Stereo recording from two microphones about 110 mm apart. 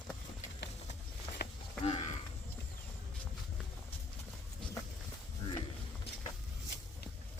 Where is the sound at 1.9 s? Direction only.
80° left.